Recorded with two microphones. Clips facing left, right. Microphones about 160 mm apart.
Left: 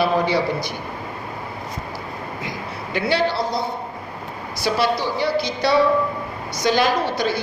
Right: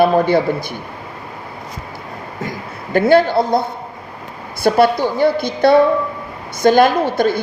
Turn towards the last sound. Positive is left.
turn(degrees=-50)  # may be behind; listen again after turning